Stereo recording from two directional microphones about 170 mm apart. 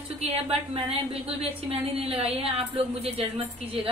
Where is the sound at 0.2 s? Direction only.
35° right (ahead or behind).